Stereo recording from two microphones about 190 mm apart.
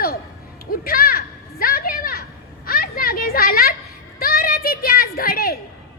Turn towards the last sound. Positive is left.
turn(degrees=50)  # may be behind; listen again after turning